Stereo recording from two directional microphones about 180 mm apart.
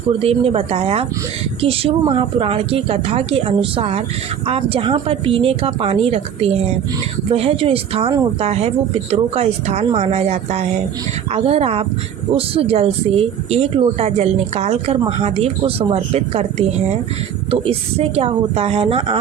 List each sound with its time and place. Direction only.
0.2 s a woman's voice: 35° right (ahead or behind)
17.5 s a woman's voice: 30° right (ahead or behind)